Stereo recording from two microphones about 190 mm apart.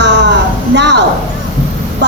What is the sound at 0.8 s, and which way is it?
Speech, 65° right (ahead or behind).